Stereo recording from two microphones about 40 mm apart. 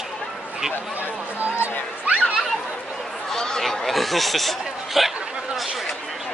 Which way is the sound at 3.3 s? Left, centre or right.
Centre.